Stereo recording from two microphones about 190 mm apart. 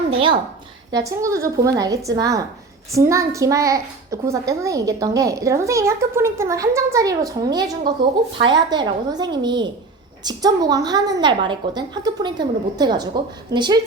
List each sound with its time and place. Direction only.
0.9 s a child's voice: 20° right (ahead or behind)